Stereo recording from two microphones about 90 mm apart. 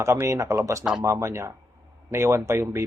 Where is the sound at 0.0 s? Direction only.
30° right (ahead or behind).